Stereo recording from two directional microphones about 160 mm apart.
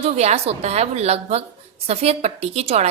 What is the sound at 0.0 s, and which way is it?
A woman's voice, 40° right (ahead or behind).